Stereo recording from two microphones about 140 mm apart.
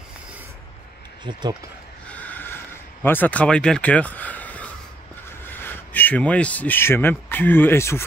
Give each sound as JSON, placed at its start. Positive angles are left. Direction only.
{"t": 1.2, "sound": "speech", "side_deg": -35}
{"t": 2.0, "sound": "a sound", "side_deg": 10}
{"t": 5.4, "sound": "speech", "side_deg": 15}